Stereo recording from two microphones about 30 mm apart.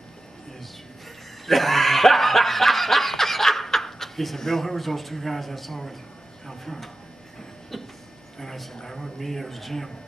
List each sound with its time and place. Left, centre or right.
1.4 s snicker: centre
4.4 s a man's voice: centre
6.4 s a sound: centre
8.4 s a woman's voice: centre